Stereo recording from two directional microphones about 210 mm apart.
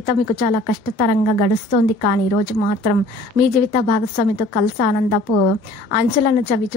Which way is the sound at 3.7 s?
40° left (ahead or behind).